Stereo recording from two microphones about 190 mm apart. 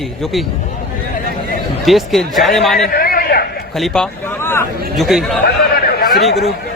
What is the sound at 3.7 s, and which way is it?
Speech, centre (ahead or behind).